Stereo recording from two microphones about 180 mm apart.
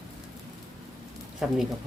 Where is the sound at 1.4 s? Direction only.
5° right (ahead or behind).